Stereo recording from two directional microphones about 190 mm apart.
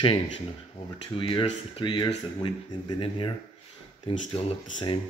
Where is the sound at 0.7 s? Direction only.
25° left (ahead or behind).